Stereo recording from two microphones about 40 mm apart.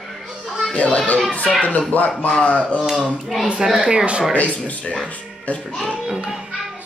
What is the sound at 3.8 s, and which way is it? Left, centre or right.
Speech, right.